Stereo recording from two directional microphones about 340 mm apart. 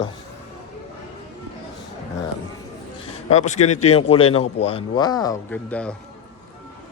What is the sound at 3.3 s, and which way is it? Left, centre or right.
A man's voice, left.